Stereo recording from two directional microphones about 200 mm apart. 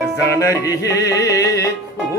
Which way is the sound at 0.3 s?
15° left (ahead or behind).